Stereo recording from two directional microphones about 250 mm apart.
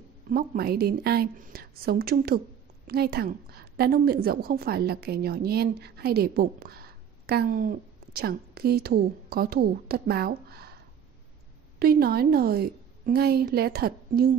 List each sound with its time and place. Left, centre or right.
0.3 s a woman's voice: right
11.8 s a woman's voice: right